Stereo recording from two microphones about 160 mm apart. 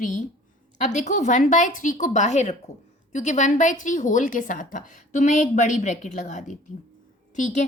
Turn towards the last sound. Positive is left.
turn(degrees=50)  # may be behind; listen again after turning